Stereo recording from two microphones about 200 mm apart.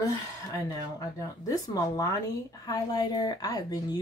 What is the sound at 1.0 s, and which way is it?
Speech, 15° left (ahead or behind).